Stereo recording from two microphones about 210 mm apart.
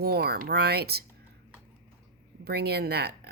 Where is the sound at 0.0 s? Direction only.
50° right (ahead or behind).